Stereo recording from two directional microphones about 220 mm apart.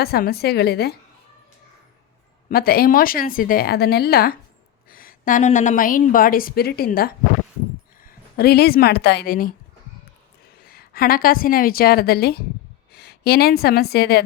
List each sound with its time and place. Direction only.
0.0 s a woman's voice: 45° left (ahead or behind)
2.5 s a woman's voice: 45° left (ahead or behind)
10.6 s a woman's voice: 45° left (ahead or behind)